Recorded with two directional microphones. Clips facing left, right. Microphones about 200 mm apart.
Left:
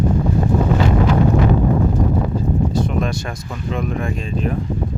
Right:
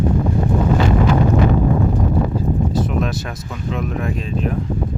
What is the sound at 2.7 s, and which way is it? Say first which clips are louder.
Speech: even; 5° right (ahead or behind).